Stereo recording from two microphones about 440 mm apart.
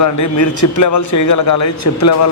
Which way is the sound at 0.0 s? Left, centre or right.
Left.